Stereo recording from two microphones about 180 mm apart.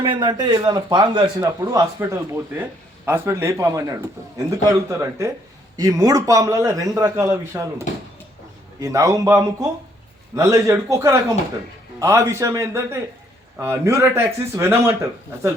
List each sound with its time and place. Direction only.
0.0 s a man's voice: 25° right (ahead or behind)